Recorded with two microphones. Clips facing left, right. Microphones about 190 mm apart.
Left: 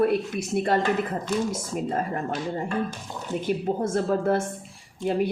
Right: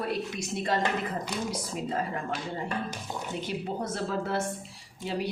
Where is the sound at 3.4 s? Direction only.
50° left (ahead or behind).